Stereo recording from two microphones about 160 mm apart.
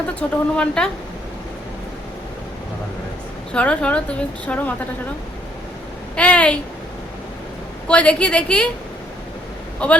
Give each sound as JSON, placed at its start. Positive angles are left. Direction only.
{"t": 0.2, "sound": "a woman's voice", "side_deg": 5}
{"t": 3.5, "sound": "a woman's voice", "side_deg": 5}
{"t": 6.1, "sound": "a woman's voice", "side_deg": 10}
{"t": 7.9, "sound": "a woman's voice", "side_deg": 5}
{"t": 9.8, "sound": "a woman's voice", "side_deg": 10}